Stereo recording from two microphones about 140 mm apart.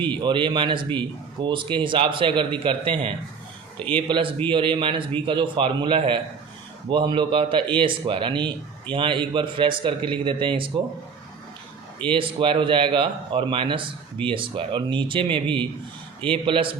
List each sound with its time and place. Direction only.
0.1 s speech: 35° right (ahead or behind)
3.8 s speech: 10° left (ahead or behind)
4.4 s speech: 35° right (ahead or behind)
12.0 s speech: 40° right (ahead or behind)